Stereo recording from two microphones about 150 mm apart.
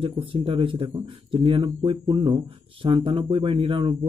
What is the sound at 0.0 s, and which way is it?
Speech, 35° right (ahead or behind).